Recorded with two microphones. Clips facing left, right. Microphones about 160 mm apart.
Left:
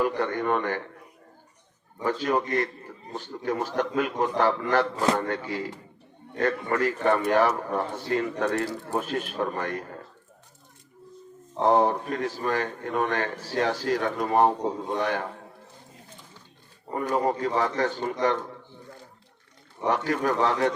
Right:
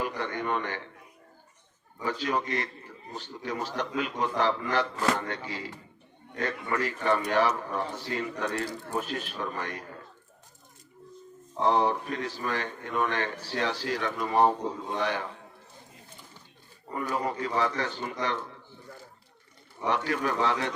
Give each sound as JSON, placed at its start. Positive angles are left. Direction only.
{"t": 0.0, "sound": "a man's voice", "side_deg": 50}
{"t": 2.0, "sound": "a man's voice", "side_deg": 50}
{"t": 11.6, "sound": "a man's voice", "side_deg": 45}
{"t": 16.9, "sound": "a man's voice", "side_deg": 45}
{"t": 19.8, "sound": "a man's voice", "side_deg": 45}